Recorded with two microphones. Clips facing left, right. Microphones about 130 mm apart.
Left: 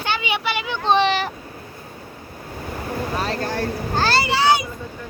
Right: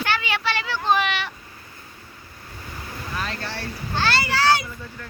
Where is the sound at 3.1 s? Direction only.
40° left (ahead or behind).